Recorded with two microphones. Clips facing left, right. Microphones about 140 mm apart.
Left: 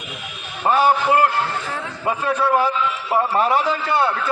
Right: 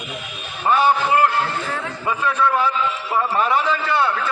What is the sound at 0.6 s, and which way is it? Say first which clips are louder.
A man's voice: left 1 dB; 35° left (ahead or behind).